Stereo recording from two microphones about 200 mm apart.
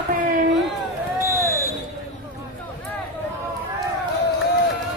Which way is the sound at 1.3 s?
10° left (ahead or behind).